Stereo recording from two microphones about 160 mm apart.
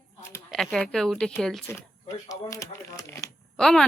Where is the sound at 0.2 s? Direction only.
15° left (ahead or behind).